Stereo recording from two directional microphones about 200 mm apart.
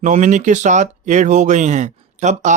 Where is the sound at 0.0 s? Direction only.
35° right (ahead or behind).